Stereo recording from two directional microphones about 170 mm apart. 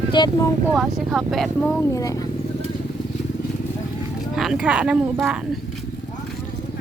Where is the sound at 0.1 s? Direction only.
25° left (ahead or behind).